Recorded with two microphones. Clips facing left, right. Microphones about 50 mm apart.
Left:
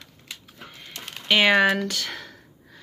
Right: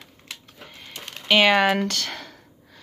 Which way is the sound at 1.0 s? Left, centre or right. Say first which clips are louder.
Right 2 dB; centre.